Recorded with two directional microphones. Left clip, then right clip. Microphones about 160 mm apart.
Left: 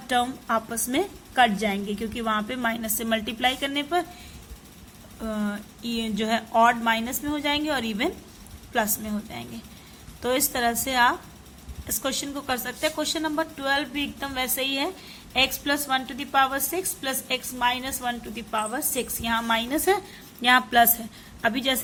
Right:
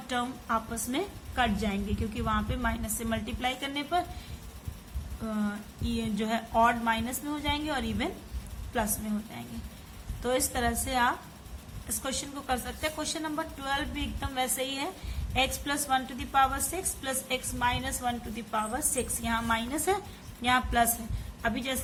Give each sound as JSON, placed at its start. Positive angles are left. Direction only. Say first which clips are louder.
{"t": 0.1, "sound": "a woman's voice", "louder": "left 7 dB", "side_deg": 45}
{"t": 5.2, "sound": "a woman's voice", "louder": "left 4 dB", "side_deg": 45}
{"t": 10.2, "sound": "a woman's voice", "louder": "left 5 dB", "side_deg": 40}